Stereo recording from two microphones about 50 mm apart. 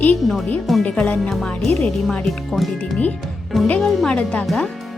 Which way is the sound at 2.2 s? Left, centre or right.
Centre.